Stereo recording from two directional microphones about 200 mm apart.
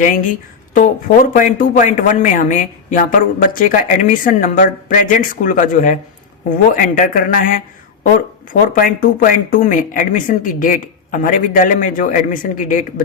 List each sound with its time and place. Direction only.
0.0 s a man's voice: 40° left (ahead or behind)
8.7 s a man's voice: 45° left (ahead or behind)